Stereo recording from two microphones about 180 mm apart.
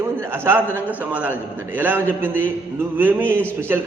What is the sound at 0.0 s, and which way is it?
A man's voice, 15° right (ahead or behind).